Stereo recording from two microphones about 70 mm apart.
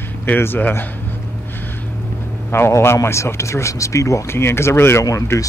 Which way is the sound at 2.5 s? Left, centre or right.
Left.